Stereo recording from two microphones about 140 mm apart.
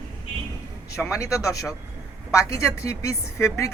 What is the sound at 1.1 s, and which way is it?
A woman's voice, 25° left (ahead or behind).